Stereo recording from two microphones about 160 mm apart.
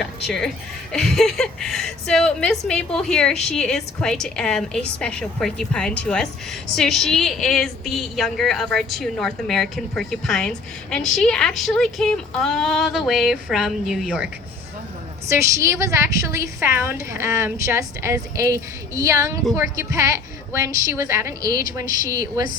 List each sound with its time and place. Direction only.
0.0 s a woman's voice: centre (ahead or behind)
15.3 s a woman's voice: 20° right (ahead or behind)
21.8 s a woman's voice: 60° left (ahead or behind)
22.1 s a woman's voice: 20° right (ahead or behind)